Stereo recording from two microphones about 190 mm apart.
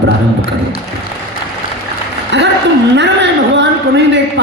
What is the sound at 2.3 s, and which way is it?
Speech, 65° right (ahead or behind).